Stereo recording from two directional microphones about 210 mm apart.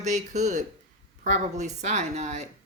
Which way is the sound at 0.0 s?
35° right (ahead or behind).